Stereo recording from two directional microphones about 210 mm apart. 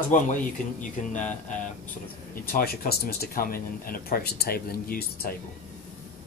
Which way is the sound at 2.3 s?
45° left (ahead or behind).